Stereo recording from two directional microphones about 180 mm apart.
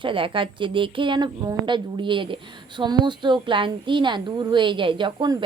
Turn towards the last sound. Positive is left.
turn(degrees=-25)  # may be behind; listen again after turning